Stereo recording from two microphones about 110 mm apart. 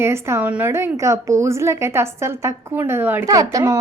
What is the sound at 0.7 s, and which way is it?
A woman's voice, 25° right (ahead or behind).